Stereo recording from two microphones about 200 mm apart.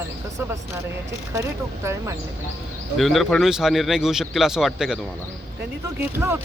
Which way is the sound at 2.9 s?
Centre (ahead or behind).